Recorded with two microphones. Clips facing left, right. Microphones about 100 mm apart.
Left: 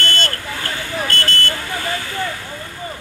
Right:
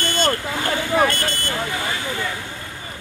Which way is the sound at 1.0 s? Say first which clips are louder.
Even; 15° right (ahead or behind).